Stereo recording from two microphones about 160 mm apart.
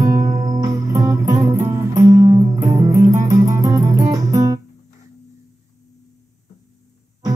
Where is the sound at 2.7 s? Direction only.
20° right (ahead or behind).